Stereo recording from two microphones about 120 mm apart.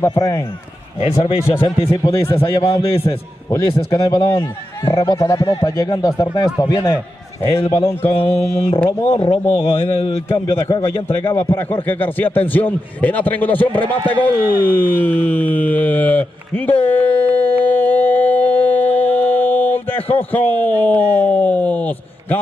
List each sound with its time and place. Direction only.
0.1 s a man's voice: 35° left (ahead or behind)
1.0 s speech: 55° left (ahead or behind)
3.4 s a man's voice: 30° left (ahead or behind)
7.7 s a sound: 25° left (ahead or behind)
8.2 s speech: 50° left (ahead or behind)
10.4 s a man's voice: 35° left (ahead or behind)
11.3 s speech: 20° left (ahead or behind)
16.9 s a sound: 15° left (ahead or behind)
20.2 s speech: 15° left (ahead or behind)